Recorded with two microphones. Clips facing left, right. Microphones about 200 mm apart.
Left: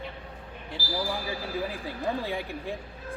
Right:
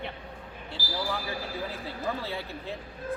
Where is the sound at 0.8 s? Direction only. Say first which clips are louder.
Left 3 dB; 45° right (ahead or behind).